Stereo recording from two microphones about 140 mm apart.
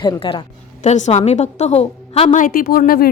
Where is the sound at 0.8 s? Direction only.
55° left (ahead or behind).